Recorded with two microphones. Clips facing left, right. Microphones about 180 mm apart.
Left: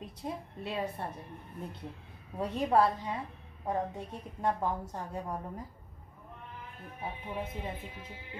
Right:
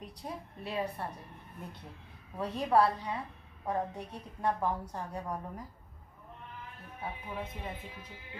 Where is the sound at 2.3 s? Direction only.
25° left (ahead or behind).